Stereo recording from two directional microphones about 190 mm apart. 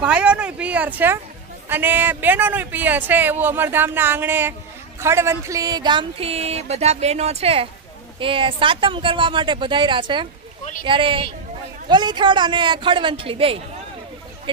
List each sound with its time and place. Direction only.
0.0 s a man's voice: 5° right (ahead or behind); by 13.6 s 30° right (ahead or behind)